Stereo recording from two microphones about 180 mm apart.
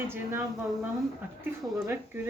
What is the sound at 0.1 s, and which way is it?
Speech, 15° right (ahead or behind).